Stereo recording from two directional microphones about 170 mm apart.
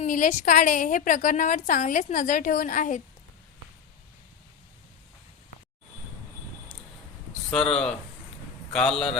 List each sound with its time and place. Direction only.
0.0 s a woman's voice: 50° left (ahead or behind)
7.5 s a man's voice: 5° left (ahead or behind)